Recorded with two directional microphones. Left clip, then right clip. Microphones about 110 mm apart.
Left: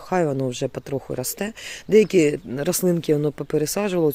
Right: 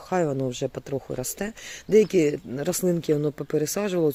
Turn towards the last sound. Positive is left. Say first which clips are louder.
# left 3 dB
turn(degrees=30)  # may be behind; listen again after turning